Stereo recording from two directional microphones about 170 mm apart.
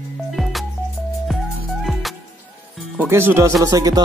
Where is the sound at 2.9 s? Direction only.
15° right (ahead or behind).